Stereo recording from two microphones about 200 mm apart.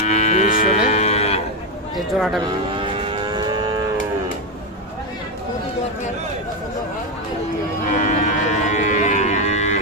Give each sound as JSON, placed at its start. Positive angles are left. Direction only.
{"t": 0.0, "sound": "moo", "side_deg": 35}
{"t": 2.0, "sound": "speech", "side_deg": 0}
{"t": 2.7, "sound": "livestock", "side_deg": -25}
{"t": 7.9, "sound": "cattle", "side_deg": 35}